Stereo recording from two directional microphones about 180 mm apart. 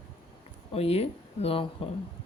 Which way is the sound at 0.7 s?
35° left (ahead or behind).